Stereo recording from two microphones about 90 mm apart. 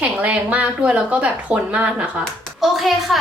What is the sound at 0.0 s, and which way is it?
Speech, 15° right (ahead or behind).